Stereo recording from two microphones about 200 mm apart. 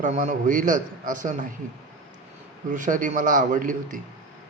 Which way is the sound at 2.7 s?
40° right (ahead or behind).